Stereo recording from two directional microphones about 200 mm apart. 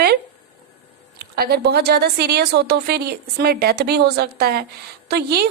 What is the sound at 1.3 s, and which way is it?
A woman's voice, 50° right (ahead or behind).